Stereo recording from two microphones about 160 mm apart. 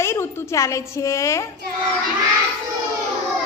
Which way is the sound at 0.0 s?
15° left (ahead or behind).